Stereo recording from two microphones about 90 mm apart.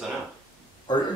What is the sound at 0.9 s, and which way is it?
Speech, 55° left (ahead or behind).